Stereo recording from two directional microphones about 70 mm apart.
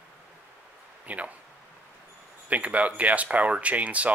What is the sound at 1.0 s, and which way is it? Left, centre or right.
Speech, centre.